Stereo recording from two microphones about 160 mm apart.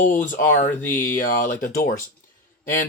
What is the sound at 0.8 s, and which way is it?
Speech, 15° left (ahead or behind).